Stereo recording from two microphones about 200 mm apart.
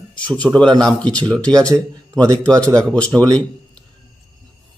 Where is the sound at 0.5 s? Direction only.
20° right (ahead or behind).